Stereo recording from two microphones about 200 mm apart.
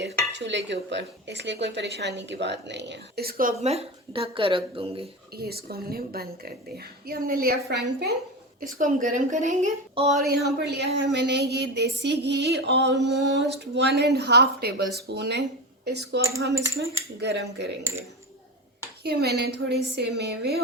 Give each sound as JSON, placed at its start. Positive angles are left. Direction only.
{"t": 0.0, "sound": "speech", "side_deg": -60}
{"t": 3.6, "sound": "speech", "side_deg": -30}
{"t": 5.4, "sound": "speech", "side_deg": -50}
{"t": 8.6, "sound": "speech", "side_deg": -40}
{"t": 10.2, "sound": "speech", "side_deg": -55}
{"t": 19.0, "sound": "speech", "side_deg": -55}